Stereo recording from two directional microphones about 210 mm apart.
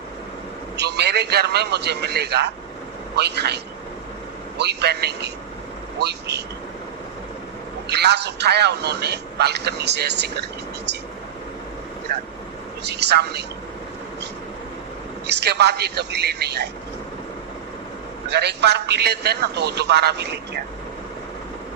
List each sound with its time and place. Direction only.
0.8 s a man's voice: 55° right (ahead or behind)
7.9 s a man's voice: 55° right (ahead or behind)
12.8 s a man's voice: 55° right (ahead or behind)
15.3 s a man's voice: 55° right (ahead or behind)
18.3 s a man's voice: 55° right (ahead or behind)